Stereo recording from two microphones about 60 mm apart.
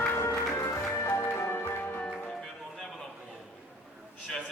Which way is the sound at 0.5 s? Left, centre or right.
Left.